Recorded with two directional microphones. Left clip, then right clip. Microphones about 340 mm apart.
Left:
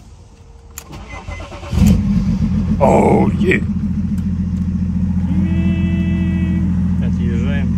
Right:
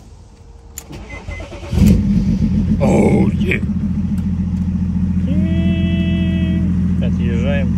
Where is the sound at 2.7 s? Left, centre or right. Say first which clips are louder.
Left 4 dB; centre.